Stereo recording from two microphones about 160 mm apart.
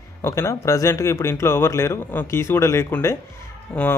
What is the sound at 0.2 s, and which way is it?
Speech, 15° left (ahead or behind).